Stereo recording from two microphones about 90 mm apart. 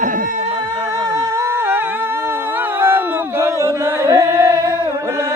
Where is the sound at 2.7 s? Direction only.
25° right (ahead or behind).